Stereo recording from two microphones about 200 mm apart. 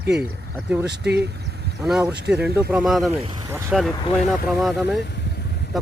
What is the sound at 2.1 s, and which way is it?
Speech, 55° right (ahead or behind).